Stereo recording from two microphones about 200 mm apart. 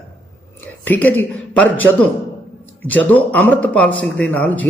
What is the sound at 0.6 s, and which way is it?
Speech, 10° left (ahead or behind).